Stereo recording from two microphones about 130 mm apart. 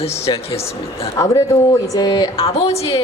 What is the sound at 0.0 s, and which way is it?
Speech, 50° left (ahead or behind).